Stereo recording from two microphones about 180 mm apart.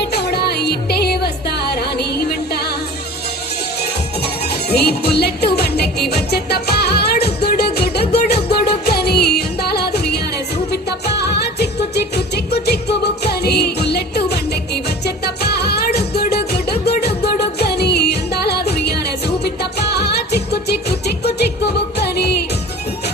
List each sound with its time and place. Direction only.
0.0 s music: 65° left (ahead or behind)
4.4 s music: 60° left (ahead or behind)
21.9 s music: 65° left (ahead or behind)